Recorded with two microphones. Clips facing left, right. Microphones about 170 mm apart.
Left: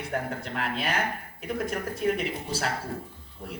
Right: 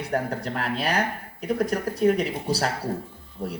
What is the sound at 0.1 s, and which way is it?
A man's voice, 40° right (ahead or behind).